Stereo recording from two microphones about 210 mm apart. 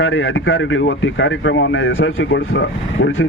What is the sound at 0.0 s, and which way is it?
Speech, 70° left (ahead or behind).